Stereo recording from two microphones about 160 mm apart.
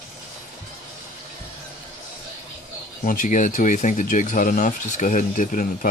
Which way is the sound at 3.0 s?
55° left (ahead or behind).